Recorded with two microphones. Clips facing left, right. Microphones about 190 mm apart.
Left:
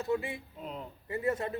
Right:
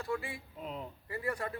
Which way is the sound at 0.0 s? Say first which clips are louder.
Left 5 dB; 20° left (ahead or behind).